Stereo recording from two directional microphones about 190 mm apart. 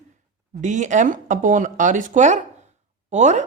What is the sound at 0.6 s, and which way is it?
Speech, 40° right (ahead or behind).